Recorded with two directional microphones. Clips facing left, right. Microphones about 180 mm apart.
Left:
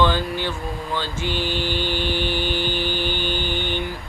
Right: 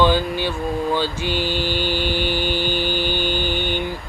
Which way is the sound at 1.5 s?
15° left (ahead or behind).